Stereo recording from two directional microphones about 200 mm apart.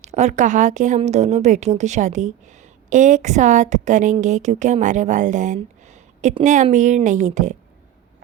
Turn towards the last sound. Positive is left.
turn(degrees=-40)  # may be behind; listen again after turning